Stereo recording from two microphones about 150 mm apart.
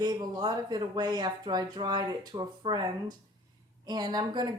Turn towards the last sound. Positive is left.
turn(degrees=-30)  # may be behind; listen again after turning